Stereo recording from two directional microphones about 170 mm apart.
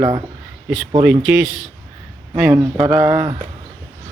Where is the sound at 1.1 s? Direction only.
5° right (ahead or behind).